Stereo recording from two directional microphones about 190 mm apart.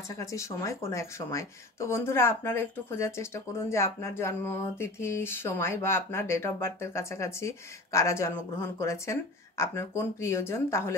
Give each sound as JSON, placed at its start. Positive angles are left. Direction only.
{"t": 0.2, "sound": "speech", "side_deg": 15}